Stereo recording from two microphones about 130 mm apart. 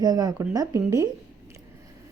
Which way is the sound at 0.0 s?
30° right (ahead or behind).